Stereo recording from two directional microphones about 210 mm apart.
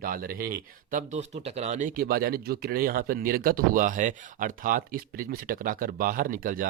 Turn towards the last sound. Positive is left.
turn(degrees=-40)  # may be behind; listen again after turning